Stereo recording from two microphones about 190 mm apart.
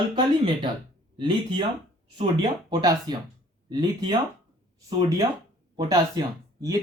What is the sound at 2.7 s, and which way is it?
Speech, 20° right (ahead or behind).